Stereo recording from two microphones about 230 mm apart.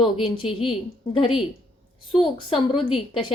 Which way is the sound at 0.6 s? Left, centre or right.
Left.